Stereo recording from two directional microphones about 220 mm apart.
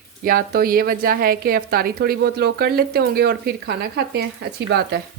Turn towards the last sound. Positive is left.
turn(degrees=-50)  # may be behind; listen again after turning